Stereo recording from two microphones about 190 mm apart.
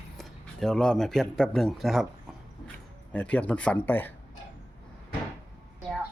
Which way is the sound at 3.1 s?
5° left (ahead or behind).